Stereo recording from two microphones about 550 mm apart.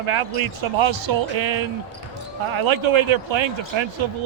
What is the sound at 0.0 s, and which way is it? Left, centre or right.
Speech, right.